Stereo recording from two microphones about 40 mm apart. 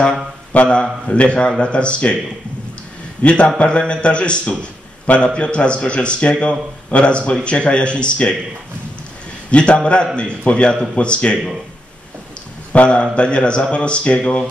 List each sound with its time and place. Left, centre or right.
0.5 s speech: left
3.2 s speech: left
9.5 s speech: left
12.7 s speech: left